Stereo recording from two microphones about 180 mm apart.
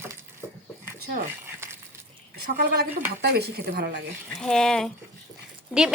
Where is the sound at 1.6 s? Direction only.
15° right (ahead or behind).